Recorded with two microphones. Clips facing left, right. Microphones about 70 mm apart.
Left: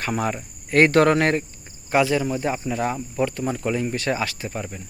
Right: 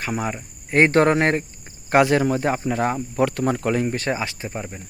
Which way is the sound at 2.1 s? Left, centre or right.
Right.